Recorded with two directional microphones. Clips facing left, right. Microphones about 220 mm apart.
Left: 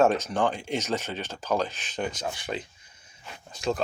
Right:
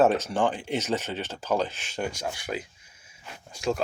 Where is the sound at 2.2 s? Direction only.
5° right (ahead or behind).